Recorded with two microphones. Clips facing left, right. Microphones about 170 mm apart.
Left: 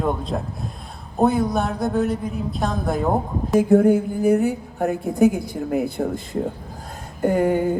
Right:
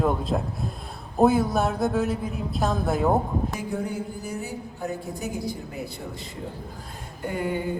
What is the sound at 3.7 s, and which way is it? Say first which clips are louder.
A woman's voice: left 14 dB; 55° left (ahead or behind).